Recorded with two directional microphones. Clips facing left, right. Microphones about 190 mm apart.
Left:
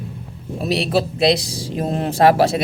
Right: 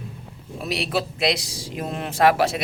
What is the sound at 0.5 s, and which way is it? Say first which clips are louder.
Speech: left 6 dB; 30° left (ahead or behind).